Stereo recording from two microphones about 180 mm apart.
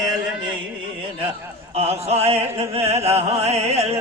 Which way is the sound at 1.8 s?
35° right (ahead or behind).